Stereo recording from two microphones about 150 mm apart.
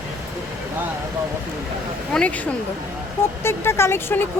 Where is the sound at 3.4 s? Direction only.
15° left (ahead or behind).